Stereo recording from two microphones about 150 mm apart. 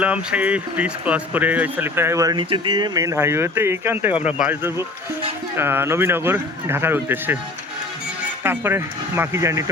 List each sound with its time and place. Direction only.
0.0 s speech: 10° right (ahead or behind)
8.4 s speech: 15° right (ahead or behind)